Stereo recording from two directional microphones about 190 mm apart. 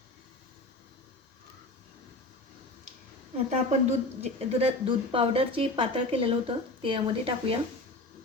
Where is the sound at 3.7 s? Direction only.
35° right (ahead or behind).